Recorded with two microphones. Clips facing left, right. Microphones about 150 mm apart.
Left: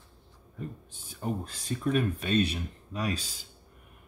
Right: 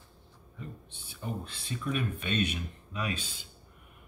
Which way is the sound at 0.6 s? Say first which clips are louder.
Left 5 dB; 45° left (ahead or behind).